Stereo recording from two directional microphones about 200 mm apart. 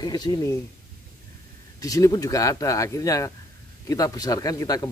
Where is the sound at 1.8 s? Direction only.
15° left (ahead or behind).